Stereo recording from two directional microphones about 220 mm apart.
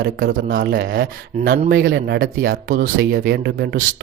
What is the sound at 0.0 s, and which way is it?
Speech, 40° right (ahead or behind).